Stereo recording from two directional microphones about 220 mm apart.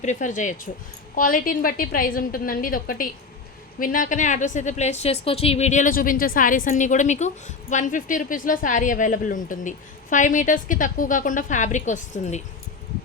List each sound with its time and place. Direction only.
0.0 s a woman's voice: 35° left (ahead or behind)